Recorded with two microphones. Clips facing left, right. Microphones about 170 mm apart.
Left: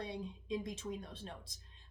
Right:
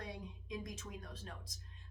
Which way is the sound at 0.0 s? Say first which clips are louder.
Left 5 dB; 25° left (ahead or behind).